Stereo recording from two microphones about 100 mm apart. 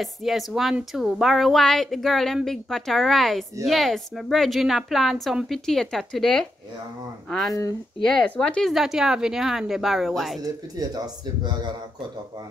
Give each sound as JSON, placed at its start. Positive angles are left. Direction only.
{"t": 0.0, "sound": "a woman's voice", "side_deg": 0}
{"t": 10.4, "sound": "a man's voice", "side_deg": -40}